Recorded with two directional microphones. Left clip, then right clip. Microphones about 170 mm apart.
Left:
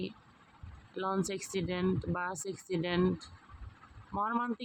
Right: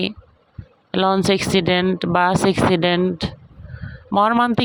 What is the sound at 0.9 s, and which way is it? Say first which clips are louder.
Speech: right 18 dB; 55° right (ahead or behind).